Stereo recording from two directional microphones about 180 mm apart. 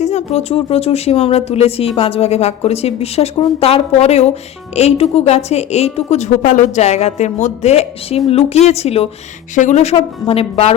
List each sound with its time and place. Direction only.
0.0 s a woman's voice: 40° left (ahead or behind)